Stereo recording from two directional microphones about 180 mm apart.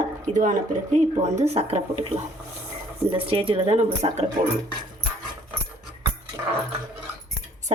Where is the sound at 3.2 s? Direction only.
30° right (ahead or behind).